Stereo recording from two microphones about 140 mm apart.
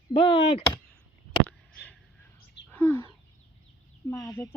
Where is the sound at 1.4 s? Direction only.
10° left (ahead or behind).